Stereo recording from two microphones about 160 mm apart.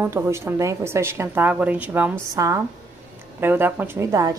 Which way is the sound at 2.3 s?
20° right (ahead or behind).